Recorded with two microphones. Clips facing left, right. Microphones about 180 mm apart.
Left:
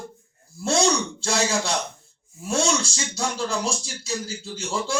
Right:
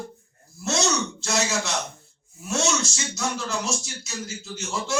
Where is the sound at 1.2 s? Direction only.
30° left (ahead or behind).